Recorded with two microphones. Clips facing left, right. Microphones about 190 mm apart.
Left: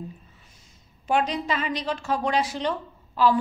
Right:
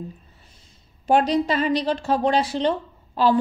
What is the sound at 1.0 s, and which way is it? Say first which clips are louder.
A woman's voice: right 6 dB; 35° right (ahead or behind).